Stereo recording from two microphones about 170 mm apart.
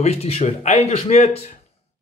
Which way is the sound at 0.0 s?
35° left (ahead or behind).